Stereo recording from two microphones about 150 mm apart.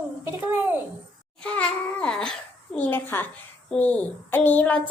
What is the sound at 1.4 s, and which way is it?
A woman's voice, 10° left (ahead or behind).